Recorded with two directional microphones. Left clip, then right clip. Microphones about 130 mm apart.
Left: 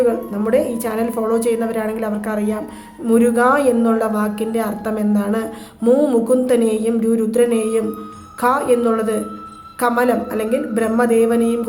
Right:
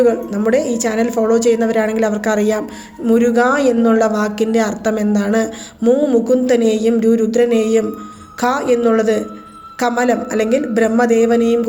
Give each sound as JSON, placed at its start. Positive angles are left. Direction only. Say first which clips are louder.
{"t": 0.0, "sound": "a woman's voice", "louder": "right 3 dB", "side_deg": -30}
{"t": 3.1, "sound": "a woman's voice", "louder": "right 1 dB", "side_deg": -20}
{"t": 5.8, "sound": "a woman's voice", "louder": "right 1 dB", "side_deg": -5}